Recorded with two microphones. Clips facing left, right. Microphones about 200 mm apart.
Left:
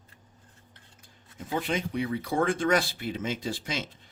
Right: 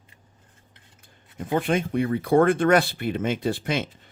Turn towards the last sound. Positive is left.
turn(degrees=-60)  # may be behind; listen again after turning